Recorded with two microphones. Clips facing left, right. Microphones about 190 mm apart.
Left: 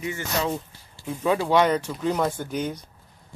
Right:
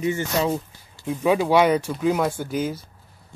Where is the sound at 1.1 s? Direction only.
10° right (ahead or behind).